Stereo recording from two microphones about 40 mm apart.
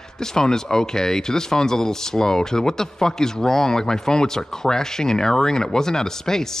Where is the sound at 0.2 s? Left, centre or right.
Centre.